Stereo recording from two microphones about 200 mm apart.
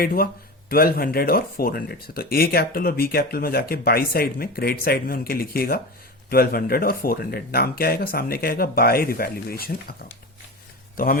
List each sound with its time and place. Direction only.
0.0 s speech: 50° left (ahead or behind)